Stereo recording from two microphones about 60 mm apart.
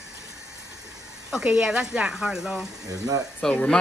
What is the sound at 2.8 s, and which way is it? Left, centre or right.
Speech, right.